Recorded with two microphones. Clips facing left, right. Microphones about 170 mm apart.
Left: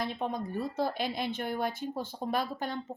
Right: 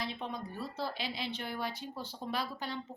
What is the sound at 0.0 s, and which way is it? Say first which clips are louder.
Speech: left 6 dB; 50° left (ahead or behind).